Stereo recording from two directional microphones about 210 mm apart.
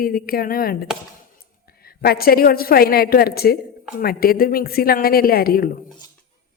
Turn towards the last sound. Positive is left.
turn(degrees=45)  # may be behind; listen again after turning